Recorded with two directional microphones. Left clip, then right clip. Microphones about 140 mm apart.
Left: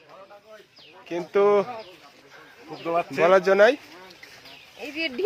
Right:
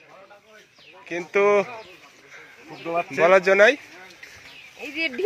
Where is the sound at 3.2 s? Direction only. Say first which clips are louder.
Right 2 dB; 15° left (ahead or behind).